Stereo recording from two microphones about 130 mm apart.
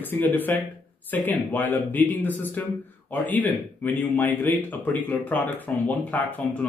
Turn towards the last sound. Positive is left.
turn(degrees=10)  # may be behind; listen again after turning